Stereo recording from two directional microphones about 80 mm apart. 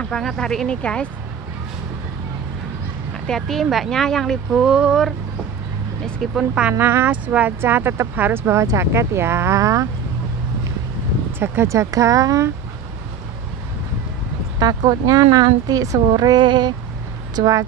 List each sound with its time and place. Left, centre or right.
0.1 s speech: centre
3.3 s speech: centre
4.5 s speech: centre
6.3 s speech: centre
6.8 s speech: right
11.3 s speech: right
14.6 s speech: right
16.2 s child singing: right
17.4 s speech: right